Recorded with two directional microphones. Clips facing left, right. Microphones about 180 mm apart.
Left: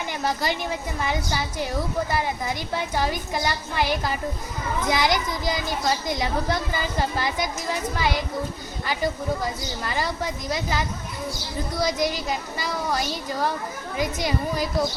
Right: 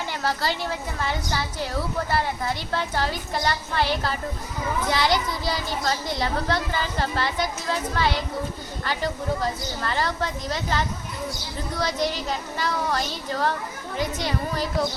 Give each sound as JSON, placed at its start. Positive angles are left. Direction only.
{"t": 0.1, "sound": "a child's voice", "side_deg": 15}